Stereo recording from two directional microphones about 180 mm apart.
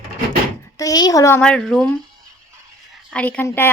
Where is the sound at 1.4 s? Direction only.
5° left (ahead or behind).